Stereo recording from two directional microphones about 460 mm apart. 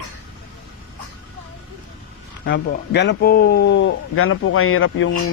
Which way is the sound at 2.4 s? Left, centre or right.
Left.